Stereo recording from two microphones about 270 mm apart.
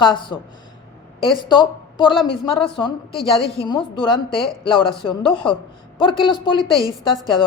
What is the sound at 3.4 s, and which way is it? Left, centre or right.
A woman's voice, centre.